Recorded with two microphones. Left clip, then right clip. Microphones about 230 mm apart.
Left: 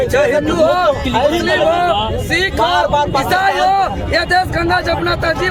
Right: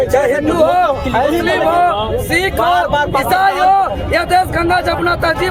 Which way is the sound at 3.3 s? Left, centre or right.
Centre.